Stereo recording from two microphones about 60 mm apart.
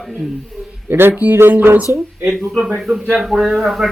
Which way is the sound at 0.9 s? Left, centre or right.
Right.